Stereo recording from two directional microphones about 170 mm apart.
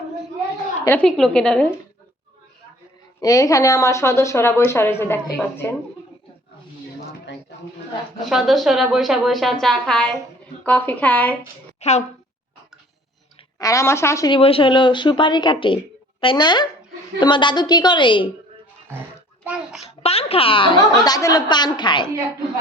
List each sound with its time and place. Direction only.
0.9 s a woman's voice: 5° left (ahead or behind)
3.2 s speech: 20° left (ahead or behind)
8.3 s a woman's voice: centre (ahead or behind)
11.8 s a child's voice: 40° left (ahead or behind)
13.6 s speech: 20° left (ahead or behind)
14.3 s a woman's voice: 30° left (ahead or behind)
19.5 s a woman's voice: 5° right (ahead or behind)
20.0 s a woman's voice: 35° left (ahead or behind)